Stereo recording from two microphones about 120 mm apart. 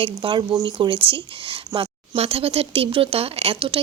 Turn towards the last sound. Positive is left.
turn(degrees=-50)  # may be behind; listen again after turning